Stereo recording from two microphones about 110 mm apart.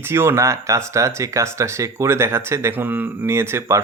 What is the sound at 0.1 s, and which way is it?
Speech, 25° right (ahead or behind).